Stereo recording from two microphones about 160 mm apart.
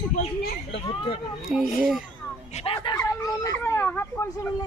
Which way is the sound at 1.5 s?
5° right (ahead or behind).